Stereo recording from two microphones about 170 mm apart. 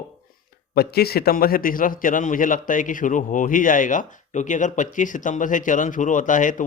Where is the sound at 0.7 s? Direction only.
65° left (ahead or behind).